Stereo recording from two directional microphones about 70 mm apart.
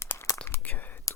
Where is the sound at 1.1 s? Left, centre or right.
Left.